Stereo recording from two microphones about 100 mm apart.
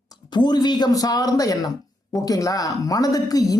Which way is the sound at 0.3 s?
45° left (ahead or behind).